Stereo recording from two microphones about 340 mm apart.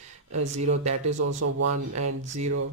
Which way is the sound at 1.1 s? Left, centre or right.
Right.